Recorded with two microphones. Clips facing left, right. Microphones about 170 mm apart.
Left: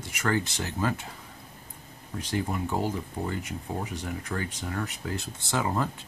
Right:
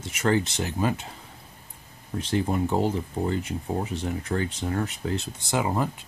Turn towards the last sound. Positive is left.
turn(degrees=-15)  # may be behind; listen again after turning